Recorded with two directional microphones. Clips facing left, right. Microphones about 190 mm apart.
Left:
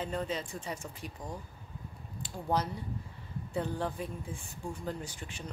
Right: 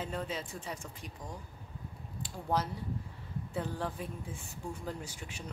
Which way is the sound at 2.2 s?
Centre (ahead or behind).